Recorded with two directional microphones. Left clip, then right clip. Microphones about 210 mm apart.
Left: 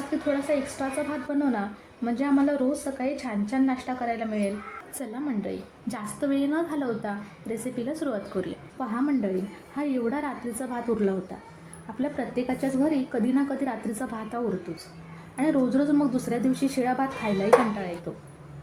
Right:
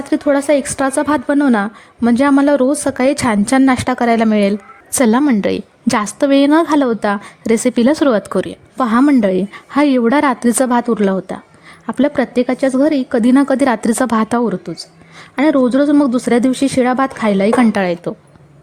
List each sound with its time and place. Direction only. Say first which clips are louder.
0.5 s a woman's voice: right 13 dB; 50° right (ahead or behind)